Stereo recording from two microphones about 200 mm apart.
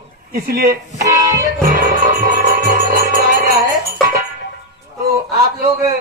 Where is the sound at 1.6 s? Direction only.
45° right (ahead or behind).